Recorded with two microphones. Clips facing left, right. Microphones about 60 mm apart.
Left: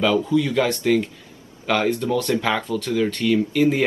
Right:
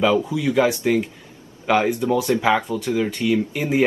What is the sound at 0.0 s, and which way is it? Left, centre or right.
Speech, centre.